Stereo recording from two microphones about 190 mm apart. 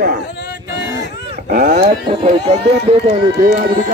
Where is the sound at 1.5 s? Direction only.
45° right (ahead or behind).